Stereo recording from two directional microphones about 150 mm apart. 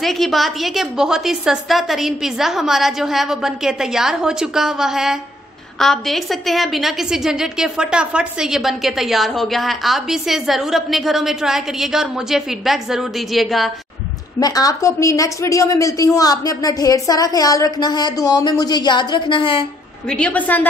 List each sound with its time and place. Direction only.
0.0 s a woman's voice: centre (ahead or behind)
14.4 s a woman's voice: 25° left (ahead or behind)
20.1 s a woman's voice: 5° left (ahead or behind)